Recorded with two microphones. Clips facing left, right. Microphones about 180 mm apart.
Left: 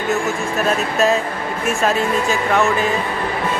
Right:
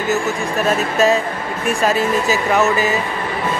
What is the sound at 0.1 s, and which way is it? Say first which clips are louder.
A man's voice: right 1 dB; centre (ahead or behind).